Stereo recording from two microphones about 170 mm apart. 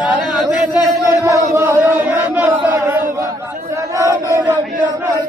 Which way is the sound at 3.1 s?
20° right (ahead or behind).